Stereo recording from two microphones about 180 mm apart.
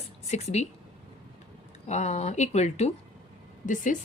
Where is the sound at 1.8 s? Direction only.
40° left (ahead or behind).